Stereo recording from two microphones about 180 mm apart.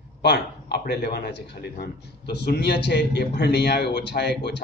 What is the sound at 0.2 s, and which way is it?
A man's voice, 65° left (ahead or behind).